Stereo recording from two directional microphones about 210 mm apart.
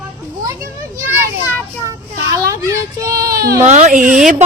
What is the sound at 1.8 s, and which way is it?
Children playing, 15° right (ahead or behind).